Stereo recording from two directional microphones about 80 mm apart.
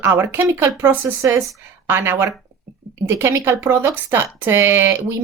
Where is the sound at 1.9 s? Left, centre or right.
Right.